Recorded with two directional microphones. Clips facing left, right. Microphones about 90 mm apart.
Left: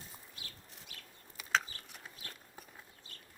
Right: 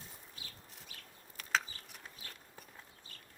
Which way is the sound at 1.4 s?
Centre (ahead or behind).